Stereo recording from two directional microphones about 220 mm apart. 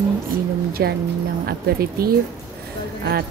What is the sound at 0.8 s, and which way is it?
Music, 45° right (ahead or behind).